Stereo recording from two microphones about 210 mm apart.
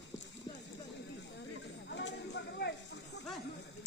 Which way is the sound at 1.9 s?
55° left (ahead or behind).